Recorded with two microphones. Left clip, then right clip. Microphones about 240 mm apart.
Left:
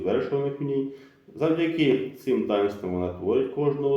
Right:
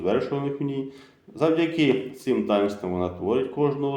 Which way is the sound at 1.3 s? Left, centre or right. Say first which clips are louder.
Right 2 dB; right.